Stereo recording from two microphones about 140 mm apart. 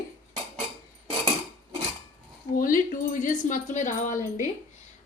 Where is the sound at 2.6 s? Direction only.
75° left (ahead or behind).